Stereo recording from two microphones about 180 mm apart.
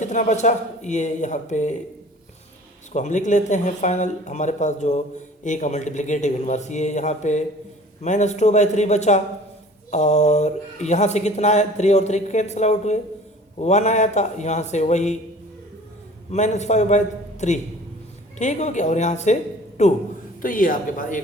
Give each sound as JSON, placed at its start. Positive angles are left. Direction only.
{"t": 0.0, "sound": "speech", "side_deg": 45}
{"t": 2.9, "sound": "speech", "side_deg": 40}
{"t": 16.3, "sound": "a man's voice", "side_deg": 40}